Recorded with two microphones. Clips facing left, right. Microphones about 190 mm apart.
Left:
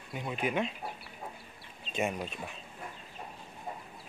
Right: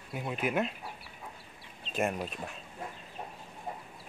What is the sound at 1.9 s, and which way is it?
Speech, centre (ahead or behind).